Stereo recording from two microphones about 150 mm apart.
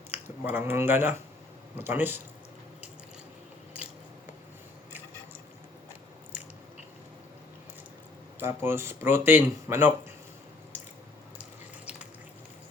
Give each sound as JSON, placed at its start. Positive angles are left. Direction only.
{"t": 0.1, "sound": "speech", "side_deg": -10}
{"t": 8.4, "sound": "speech", "side_deg": -15}